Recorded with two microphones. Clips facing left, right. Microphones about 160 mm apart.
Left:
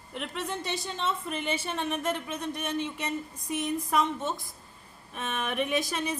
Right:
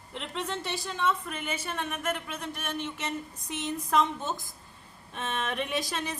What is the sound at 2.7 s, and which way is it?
Speech, 15° left (ahead or behind).